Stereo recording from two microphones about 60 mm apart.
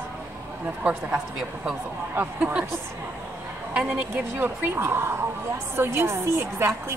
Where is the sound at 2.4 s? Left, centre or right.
Centre.